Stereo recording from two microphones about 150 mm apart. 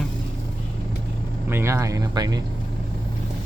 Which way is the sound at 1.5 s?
20° right (ahead or behind).